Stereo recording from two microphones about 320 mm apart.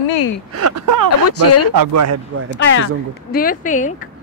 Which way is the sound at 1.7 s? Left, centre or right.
Right.